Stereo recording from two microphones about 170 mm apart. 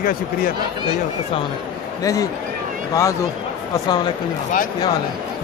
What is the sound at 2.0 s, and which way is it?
A man's voice, 20° left (ahead or behind).